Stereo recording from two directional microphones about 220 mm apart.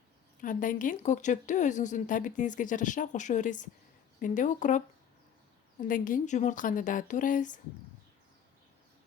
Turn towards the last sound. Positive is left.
turn(degrees=35)  # may be behind; listen again after turning